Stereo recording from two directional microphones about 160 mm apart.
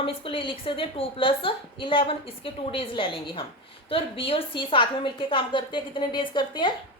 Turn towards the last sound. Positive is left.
turn(degrees=30)  # may be behind; listen again after turning